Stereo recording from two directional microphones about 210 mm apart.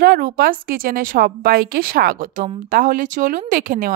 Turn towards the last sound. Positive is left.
turn(degrees=-40)  # may be behind; listen again after turning